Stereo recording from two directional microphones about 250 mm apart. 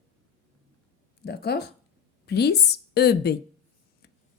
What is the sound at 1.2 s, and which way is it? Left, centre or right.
A woman's voice, left.